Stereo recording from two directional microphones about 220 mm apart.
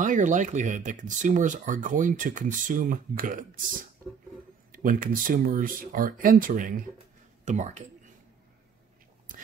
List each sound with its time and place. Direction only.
0.0 s speech: 35° right (ahead or behind)
4.7 s speech: 40° right (ahead or behind)